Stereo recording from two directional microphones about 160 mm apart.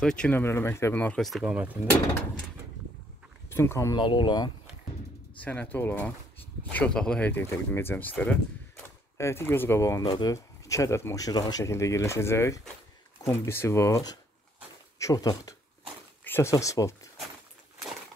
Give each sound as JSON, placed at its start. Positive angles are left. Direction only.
{"t": 0.0, "sound": "speech", "side_deg": 5}
{"t": 1.4, "sound": "speech", "side_deg": -10}
{"t": 3.4, "sound": "speech", "side_deg": 15}
{"t": 4.0, "sound": "speech", "side_deg": 30}
{"t": 5.4, "sound": "speech", "side_deg": 10}